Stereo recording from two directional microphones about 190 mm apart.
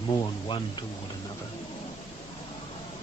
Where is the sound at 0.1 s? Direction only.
25° left (ahead or behind).